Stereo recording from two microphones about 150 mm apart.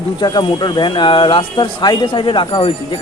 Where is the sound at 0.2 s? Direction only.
30° left (ahead or behind).